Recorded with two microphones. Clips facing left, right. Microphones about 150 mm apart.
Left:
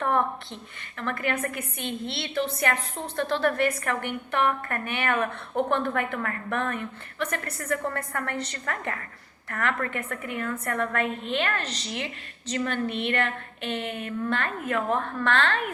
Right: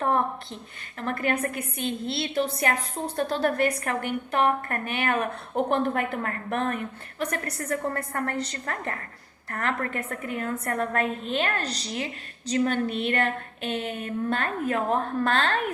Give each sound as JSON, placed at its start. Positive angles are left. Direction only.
{"t": 1.1, "sound": "a woman's voice", "side_deg": -40}